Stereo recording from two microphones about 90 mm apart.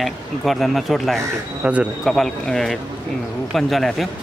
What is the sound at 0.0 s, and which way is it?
Speech, centre (ahead or behind).